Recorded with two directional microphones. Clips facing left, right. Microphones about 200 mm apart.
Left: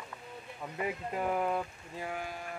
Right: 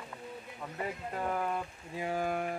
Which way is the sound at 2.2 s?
55° right (ahead or behind).